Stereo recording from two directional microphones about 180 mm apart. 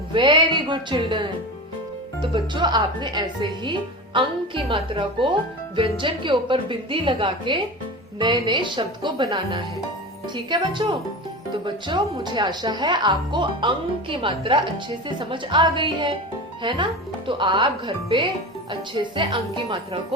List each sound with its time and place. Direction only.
0.1 s speech: 25° right (ahead or behind)
2.3 s speech: 25° right (ahead or behind)